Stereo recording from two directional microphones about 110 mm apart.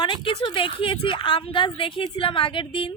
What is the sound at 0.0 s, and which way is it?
A woman's voice, 45° left (ahead or behind).